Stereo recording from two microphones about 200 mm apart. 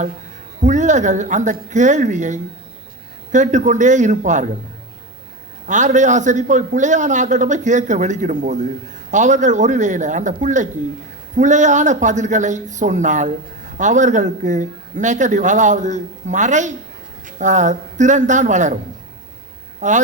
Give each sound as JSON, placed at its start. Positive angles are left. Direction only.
{"t": 0.6, "sound": "a man's voice", "side_deg": -40}
{"t": 5.6, "sound": "a man's voice", "side_deg": -40}
{"t": 19.8, "sound": "a man's voice", "side_deg": -40}